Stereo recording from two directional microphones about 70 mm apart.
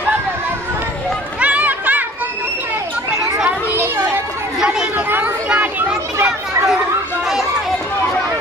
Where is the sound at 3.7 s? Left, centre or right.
Right.